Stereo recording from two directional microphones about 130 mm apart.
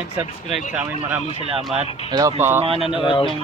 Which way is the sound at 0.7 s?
10° right (ahead or behind).